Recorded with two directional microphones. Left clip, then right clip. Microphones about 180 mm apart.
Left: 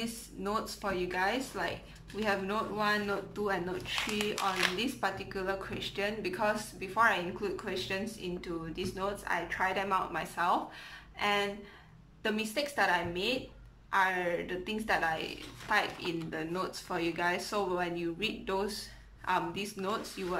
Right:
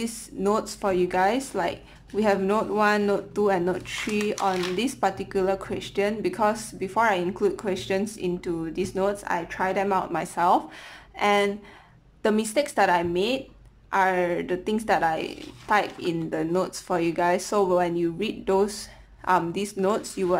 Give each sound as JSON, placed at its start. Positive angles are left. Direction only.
{"t": 0.0, "sound": "speech", "side_deg": -40}